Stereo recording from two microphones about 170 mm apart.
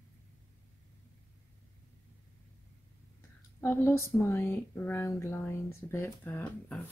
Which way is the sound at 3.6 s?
15° left (ahead or behind).